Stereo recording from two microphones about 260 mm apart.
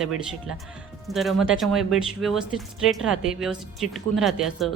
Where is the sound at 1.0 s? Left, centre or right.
Centre.